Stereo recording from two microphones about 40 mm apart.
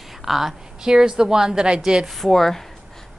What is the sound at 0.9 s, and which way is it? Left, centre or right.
A woman's voice, centre.